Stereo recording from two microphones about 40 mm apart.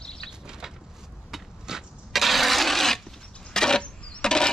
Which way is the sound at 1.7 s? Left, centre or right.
Centre.